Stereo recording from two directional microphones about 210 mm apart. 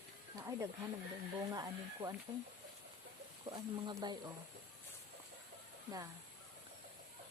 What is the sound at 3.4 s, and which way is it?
Speech, 20° right (ahead or behind).